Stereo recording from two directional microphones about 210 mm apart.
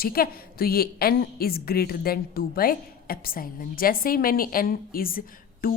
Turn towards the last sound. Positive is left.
turn(degrees=45)  # may be behind; listen again after turning